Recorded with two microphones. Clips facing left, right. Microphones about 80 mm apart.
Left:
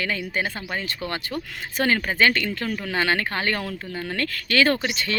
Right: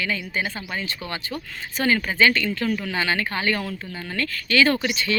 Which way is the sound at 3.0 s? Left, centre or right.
Left.